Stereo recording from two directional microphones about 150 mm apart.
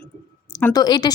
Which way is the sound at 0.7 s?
25° left (ahead or behind).